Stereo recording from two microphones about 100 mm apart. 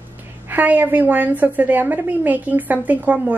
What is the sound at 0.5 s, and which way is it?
Speech, 20° right (ahead or behind).